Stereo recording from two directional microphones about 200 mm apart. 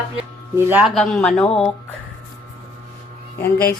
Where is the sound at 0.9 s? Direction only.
Centre (ahead or behind).